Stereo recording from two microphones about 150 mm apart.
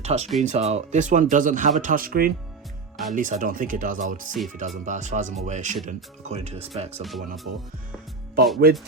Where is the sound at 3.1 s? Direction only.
60° right (ahead or behind); by 6.7 s 45° right (ahead or behind).